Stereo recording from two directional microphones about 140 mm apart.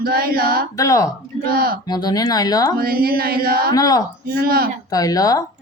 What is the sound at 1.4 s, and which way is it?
Music, 90° right.